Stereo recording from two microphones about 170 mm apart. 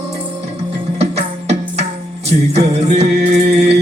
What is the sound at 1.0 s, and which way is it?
Music, 40° right (ahead or behind).